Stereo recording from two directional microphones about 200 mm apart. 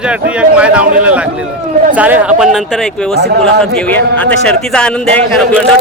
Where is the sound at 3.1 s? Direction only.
55° right (ahead or behind).